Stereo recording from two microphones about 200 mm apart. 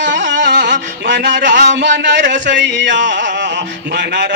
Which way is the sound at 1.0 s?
60° right (ahead or behind).